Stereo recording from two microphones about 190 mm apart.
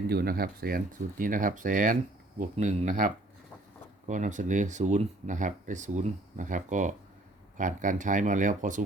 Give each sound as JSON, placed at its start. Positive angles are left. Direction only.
{"t": 0.1, "sound": "speech", "side_deg": -55}